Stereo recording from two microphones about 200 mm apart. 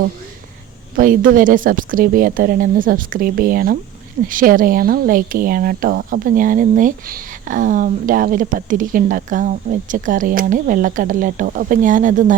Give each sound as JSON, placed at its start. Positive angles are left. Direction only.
{"t": 0.9, "sound": "speech", "side_deg": -45}